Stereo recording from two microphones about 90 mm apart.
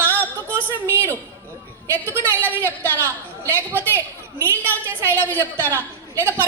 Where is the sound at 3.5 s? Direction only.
25° right (ahead or behind).